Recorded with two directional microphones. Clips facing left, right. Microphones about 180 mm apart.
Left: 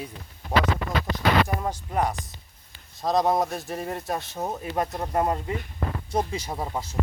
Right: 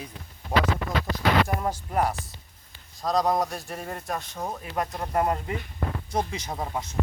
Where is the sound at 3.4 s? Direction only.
Centre (ahead or behind).